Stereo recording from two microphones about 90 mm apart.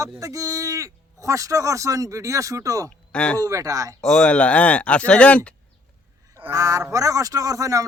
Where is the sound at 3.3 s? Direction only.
35° right (ahead or behind).